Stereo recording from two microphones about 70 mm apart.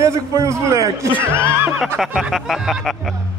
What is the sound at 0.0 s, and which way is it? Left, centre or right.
Speech, right.